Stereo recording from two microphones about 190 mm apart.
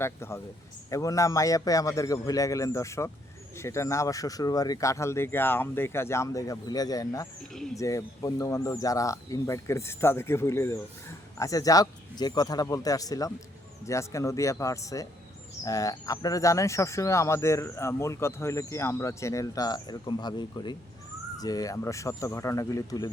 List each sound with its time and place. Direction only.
0.0 s speech: 15° left (ahead or behind)
7.5 s speech: centre (ahead or behind)
7.8 s speech: 15° left (ahead or behind)